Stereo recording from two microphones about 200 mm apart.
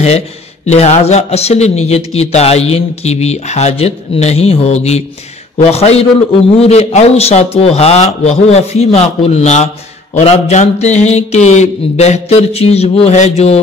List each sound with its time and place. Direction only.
0.7 s a man's voice: 35° left (ahead or behind)